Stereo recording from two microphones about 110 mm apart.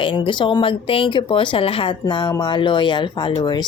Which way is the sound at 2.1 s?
40° left (ahead or behind).